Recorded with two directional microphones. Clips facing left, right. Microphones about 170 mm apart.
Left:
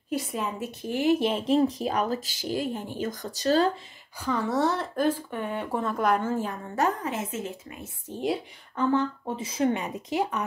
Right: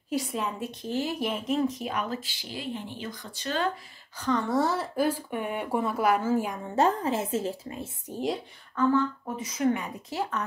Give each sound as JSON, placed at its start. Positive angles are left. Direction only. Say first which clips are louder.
{"t": 0.1, "sound": "a woman's voice", "louder": "even", "side_deg": 0}
{"t": 1.2, "sound": "speech", "louder": "left 4 dB", "side_deg": 30}
{"t": 4.2, "sound": "speech", "louder": "even", "side_deg": 5}
{"t": 6.7, "sound": "a woman's voice", "louder": "right 3 dB", "side_deg": -30}
{"t": 8.7, "sound": "a woman's voice", "louder": "right 1 dB", "side_deg": 25}